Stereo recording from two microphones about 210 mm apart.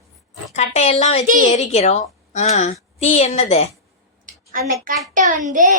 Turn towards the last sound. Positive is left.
turn(degrees=-40)  # may be behind; listen again after turning